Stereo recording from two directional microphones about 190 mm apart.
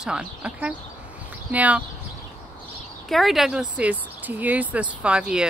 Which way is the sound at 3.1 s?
Centre (ahead or behind).